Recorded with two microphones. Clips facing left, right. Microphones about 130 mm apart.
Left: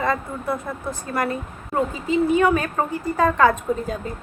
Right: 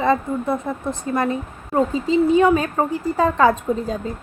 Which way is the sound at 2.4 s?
15° right (ahead or behind).